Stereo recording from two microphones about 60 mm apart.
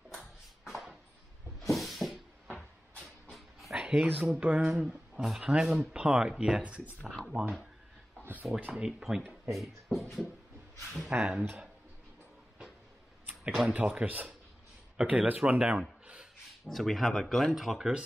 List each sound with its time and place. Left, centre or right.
0.7 s a sound: centre
3.3 s dog: centre
3.8 s speech: right
4.7 s speech: centre
8.7 s speech: centre
11.1 s speech: right
13.4 s speech: centre
13.7 s speech: right
16.6 s speech: centre